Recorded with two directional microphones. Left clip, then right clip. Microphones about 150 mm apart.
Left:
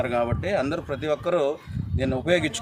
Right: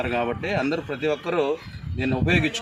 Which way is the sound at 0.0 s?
25° left (ahead or behind).